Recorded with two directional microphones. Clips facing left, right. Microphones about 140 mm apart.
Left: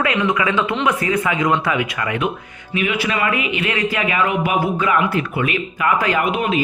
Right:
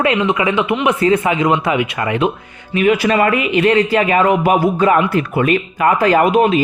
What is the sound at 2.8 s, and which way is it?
A man's voice, 40° right (ahead or behind).